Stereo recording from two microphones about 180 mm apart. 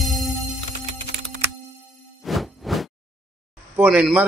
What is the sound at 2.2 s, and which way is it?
Music, centre (ahead or behind).